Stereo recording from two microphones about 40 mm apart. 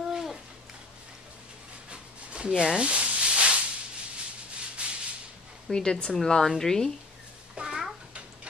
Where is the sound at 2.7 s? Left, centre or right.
Right.